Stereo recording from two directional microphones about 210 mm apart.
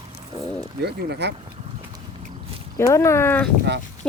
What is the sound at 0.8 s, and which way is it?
Speech, 50° right (ahead or behind).